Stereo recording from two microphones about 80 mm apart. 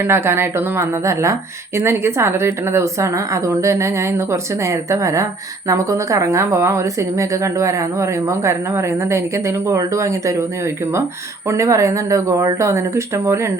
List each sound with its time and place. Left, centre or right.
0.0 s speech: right
11.4 s speech: right